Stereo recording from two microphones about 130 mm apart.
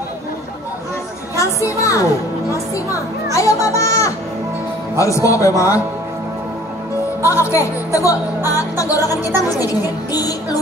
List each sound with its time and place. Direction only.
1.3 s speech: 25° left (ahead or behind)
3.3 s speech: 25° left (ahead or behind)
7.2 s speech: 20° left (ahead or behind)